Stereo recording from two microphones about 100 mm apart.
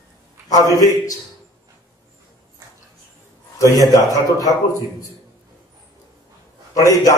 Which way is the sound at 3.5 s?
35° left (ahead or behind).